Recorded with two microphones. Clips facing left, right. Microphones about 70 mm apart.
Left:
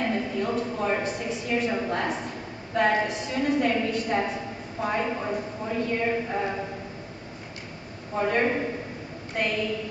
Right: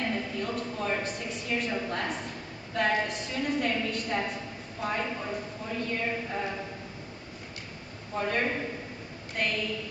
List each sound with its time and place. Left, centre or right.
0.0 s a woman's voice: centre
1.8 s a woman's voice: centre
8.1 s a woman's voice: centre